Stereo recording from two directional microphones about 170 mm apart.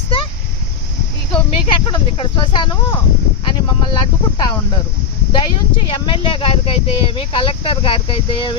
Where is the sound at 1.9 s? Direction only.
30° left (ahead or behind).